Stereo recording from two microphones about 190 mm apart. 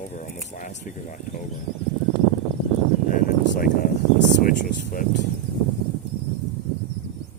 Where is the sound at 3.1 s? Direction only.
50° left (ahead or behind).